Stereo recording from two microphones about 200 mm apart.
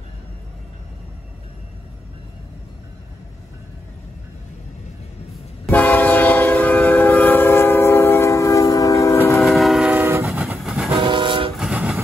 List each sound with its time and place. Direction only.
5.7 s train: 10° left (ahead or behind)
9.4 s train: centre (ahead or behind)
11.0 s train: 25° right (ahead or behind)
11.5 s train: 5° right (ahead or behind)